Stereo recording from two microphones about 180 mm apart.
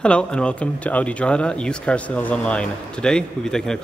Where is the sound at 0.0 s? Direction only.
5° left (ahead or behind).